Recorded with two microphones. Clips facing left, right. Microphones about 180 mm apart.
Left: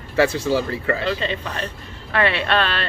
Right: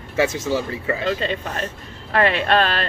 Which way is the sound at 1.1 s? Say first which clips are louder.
Right 1 dB; 45° right (ahead or behind).